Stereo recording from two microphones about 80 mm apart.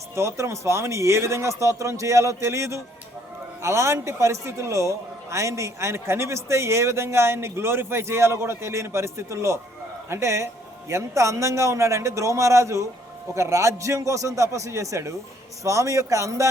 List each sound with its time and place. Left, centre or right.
0.2 s a man's voice: right